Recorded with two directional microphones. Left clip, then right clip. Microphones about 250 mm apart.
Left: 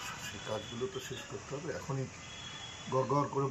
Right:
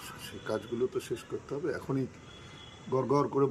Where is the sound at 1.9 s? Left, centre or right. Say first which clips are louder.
Right 7 dB; right.